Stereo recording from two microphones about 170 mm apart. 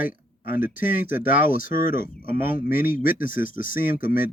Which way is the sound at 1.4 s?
55° left (ahead or behind).